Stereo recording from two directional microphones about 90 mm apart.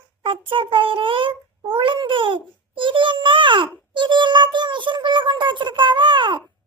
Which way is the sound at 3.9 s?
60° right (ahead or behind).